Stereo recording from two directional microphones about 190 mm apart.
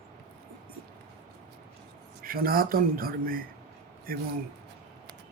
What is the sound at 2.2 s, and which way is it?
Speech, 50° right (ahead or behind).